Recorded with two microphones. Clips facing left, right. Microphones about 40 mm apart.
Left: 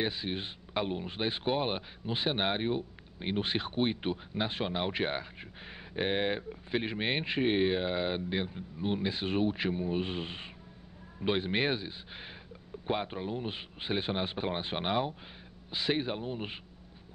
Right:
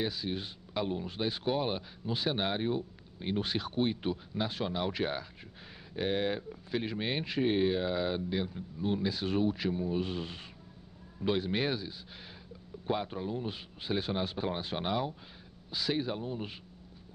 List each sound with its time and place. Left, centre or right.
0.0 s speech: left